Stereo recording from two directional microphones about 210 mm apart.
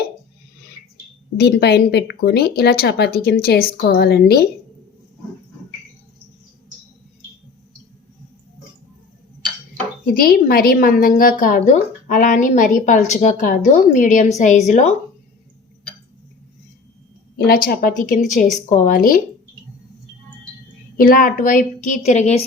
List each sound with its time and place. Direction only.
1.4 s speech: 50° left (ahead or behind)
10.1 s a woman's voice: 45° left (ahead or behind)
17.3 s a woman's voice: 45° left (ahead or behind)
21.0 s a woman's voice: 40° left (ahead or behind)